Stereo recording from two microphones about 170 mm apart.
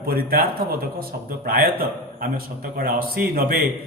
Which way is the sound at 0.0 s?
60° right (ahead or behind).